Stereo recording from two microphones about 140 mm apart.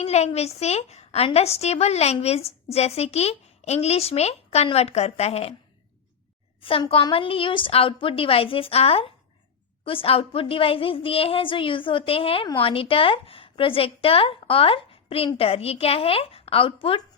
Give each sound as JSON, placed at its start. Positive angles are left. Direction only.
{"t": 0.0, "sound": "a woman's voice", "side_deg": 50}
{"t": 6.6, "sound": "a woman's voice", "side_deg": 40}